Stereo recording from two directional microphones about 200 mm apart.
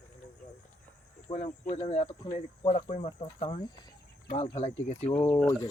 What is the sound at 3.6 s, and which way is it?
Speech, 20° left (ahead or behind).